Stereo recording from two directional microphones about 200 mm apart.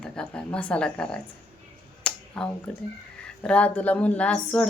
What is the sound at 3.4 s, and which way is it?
Speech, 5° left (ahead or behind).